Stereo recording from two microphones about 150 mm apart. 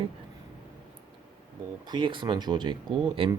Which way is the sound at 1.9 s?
30° right (ahead or behind).